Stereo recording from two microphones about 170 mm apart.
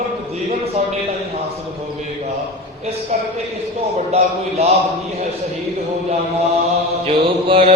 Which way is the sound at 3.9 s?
40° right (ahead or behind).